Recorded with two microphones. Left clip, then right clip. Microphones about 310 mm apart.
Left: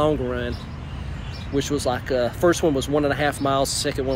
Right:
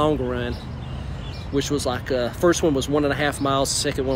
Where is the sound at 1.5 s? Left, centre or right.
Centre.